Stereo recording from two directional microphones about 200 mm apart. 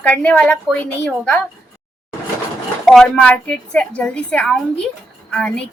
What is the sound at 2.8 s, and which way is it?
Speech, centre (ahead or behind).